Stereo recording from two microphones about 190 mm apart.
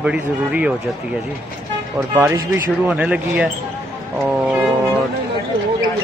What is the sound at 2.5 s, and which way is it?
Mantra, 5° right (ahead or behind).